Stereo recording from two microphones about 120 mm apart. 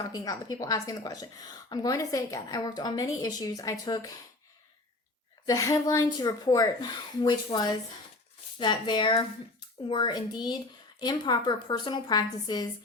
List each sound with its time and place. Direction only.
0.0 s a woman's voice: 30° left (ahead or behind)
5.5 s a woman's voice: 30° left (ahead or behind)